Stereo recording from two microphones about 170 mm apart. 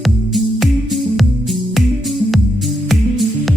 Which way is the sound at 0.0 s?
Centre (ahead or behind).